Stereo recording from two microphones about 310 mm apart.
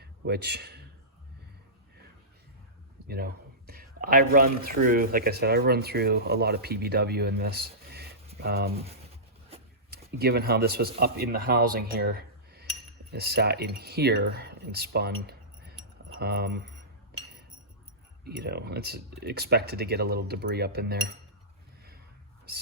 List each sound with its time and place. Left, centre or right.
0.0 s a sound: right
3.1 s speech: right
9.9 s speech: right
17.1 s chink: right
18.3 s speech: right